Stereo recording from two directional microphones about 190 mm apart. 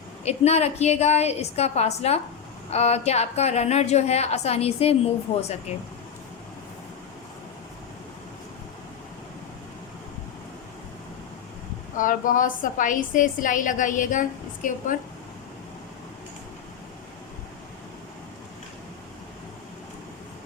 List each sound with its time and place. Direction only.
0.3 s a woman's voice: 35° left (ahead or behind)
11.9 s a woman's voice: 45° left (ahead or behind)